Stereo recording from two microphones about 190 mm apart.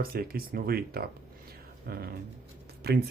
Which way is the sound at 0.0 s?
50° right (ahead or behind).